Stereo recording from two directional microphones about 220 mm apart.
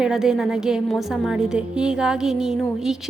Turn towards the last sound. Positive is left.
turn(degrees=0)  # may be behind; listen again after turning